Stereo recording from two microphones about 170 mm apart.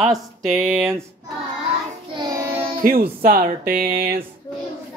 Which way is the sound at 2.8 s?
60° right (ahead or behind).